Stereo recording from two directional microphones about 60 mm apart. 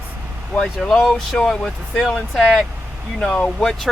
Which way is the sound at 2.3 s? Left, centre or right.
Centre.